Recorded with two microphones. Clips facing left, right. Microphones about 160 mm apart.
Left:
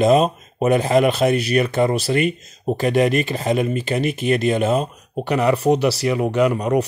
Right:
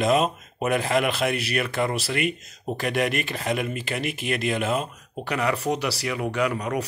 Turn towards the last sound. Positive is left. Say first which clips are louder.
# left 8 dB
turn(degrees=25)  # may be behind; listen again after turning